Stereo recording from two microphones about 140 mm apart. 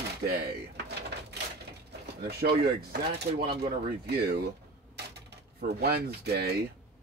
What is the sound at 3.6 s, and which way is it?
Speech, 90° right.